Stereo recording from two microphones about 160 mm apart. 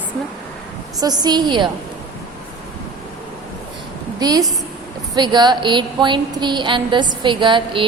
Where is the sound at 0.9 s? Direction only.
25° right (ahead or behind).